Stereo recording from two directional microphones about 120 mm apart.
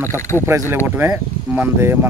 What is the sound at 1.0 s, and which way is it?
Speech, 15° right (ahead or behind).